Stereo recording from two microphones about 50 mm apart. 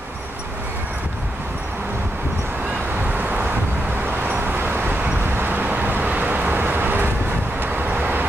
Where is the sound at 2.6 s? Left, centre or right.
Right.